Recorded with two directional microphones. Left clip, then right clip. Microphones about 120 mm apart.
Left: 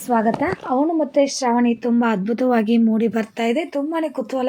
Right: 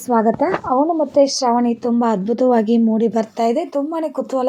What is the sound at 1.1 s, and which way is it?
Speech, 25° right (ahead or behind).